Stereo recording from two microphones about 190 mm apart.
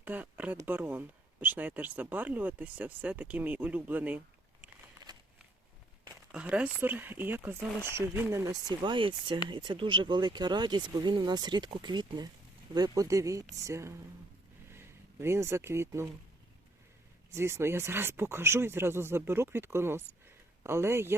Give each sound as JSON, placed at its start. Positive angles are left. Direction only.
{"t": 0.0, "sound": "speech", "side_deg": -10}
{"t": 6.3, "sound": "speech", "side_deg": -5}
{"t": 17.3, "sound": "speech", "side_deg": -15}